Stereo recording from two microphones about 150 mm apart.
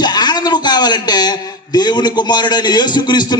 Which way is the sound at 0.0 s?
30° left (ahead or behind).